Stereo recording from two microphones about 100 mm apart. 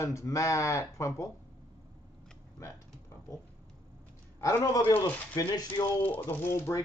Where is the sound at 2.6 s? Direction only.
30° left (ahead or behind).